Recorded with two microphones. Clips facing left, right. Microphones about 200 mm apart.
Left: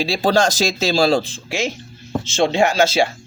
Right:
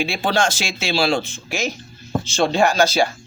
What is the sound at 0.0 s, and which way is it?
Speech, 35° left (ahead or behind).